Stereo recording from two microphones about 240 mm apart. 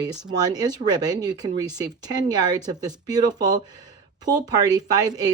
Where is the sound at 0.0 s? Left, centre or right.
Centre.